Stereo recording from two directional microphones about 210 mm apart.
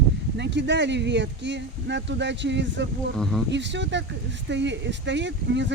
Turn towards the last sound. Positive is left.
turn(degrees=-60)  # may be behind; listen again after turning